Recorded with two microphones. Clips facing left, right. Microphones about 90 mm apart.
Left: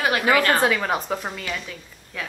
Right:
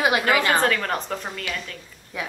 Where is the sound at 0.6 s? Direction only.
5° left (ahead or behind).